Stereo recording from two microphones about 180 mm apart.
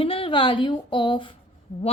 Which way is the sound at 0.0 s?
30° left (ahead or behind).